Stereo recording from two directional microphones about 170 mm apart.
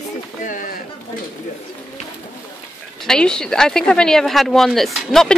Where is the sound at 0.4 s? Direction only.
50° left (ahead or behind).